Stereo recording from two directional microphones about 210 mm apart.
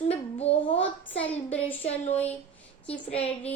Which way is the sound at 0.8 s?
5° left (ahead or behind).